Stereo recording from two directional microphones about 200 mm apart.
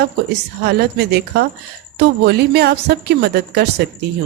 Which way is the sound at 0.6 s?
55° right (ahead or behind).